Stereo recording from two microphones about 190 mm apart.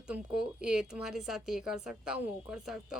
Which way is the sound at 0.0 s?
5° right (ahead or behind).